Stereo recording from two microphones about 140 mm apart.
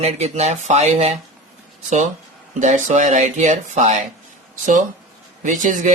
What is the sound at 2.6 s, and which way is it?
Speech, 60° right (ahead or behind).